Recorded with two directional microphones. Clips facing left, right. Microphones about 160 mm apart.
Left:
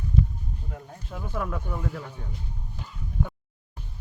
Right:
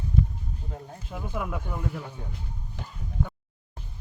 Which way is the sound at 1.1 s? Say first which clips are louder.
Left 1 dB; 10° right (ahead or behind).